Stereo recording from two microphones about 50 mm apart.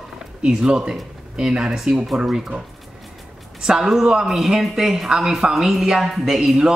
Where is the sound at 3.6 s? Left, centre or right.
Centre.